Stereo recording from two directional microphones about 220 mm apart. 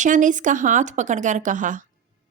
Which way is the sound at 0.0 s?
35° right (ahead or behind).